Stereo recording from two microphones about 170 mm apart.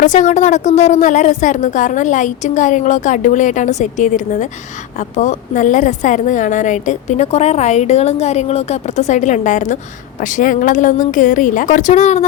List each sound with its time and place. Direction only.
0.0 s a woman's voice: 45° left (ahead or behind)